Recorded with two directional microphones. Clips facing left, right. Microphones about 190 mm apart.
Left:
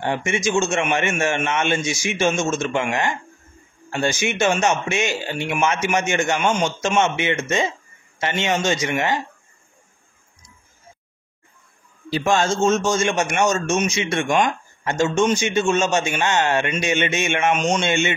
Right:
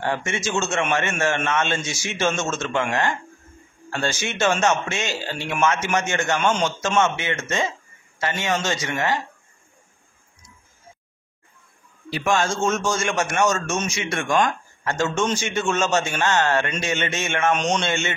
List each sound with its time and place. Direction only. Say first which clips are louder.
0.0 s a man's voice: left 3 dB; 15° left (ahead or behind)
12.1 s a man's voice: left 3 dB; 25° left (ahead or behind)
17.6 s a man's voice: left 2 dB; 5° left (ahead or behind)
17.8 s speech: left 4 dB; 15° left (ahead or behind)